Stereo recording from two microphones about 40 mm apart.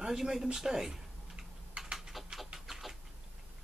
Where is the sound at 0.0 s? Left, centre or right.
Centre.